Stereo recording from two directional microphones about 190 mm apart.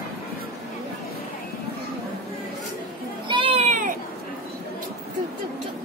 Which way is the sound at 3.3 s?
30° right (ahead or behind).